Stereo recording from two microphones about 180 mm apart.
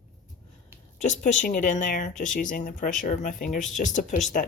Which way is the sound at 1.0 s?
45° left (ahead or behind).